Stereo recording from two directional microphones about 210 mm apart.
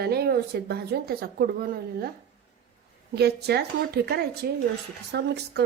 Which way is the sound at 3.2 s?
50° right (ahead or behind).